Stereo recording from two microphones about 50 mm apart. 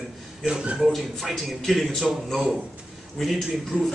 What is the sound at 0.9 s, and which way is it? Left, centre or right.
A man's voice, centre.